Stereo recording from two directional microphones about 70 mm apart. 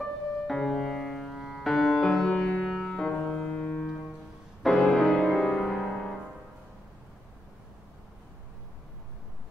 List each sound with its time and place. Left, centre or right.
0.0 s music: centre
3.8 s music: centre